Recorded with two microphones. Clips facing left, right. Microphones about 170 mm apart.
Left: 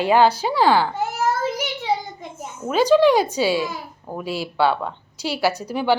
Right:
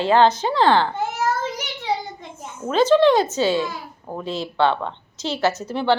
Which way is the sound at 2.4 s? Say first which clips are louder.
Right 1 dB; 10° left (ahead or behind).